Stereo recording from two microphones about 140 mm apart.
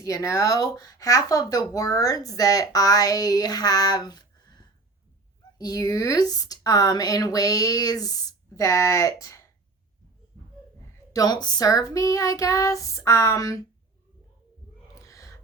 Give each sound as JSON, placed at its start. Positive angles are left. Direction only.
{"t": 0.0, "sound": "speech", "side_deg": 25}
{"t": 11.1, "sound": "speech", "side_deg": 30}
{"t": 14.9, "sound": "gasp", "side_deg": 20}